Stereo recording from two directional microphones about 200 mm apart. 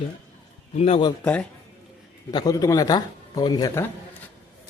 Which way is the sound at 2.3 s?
20° left (ahead or behind).